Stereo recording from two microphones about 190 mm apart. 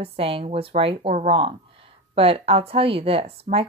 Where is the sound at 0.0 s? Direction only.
30° right (ahead or behind).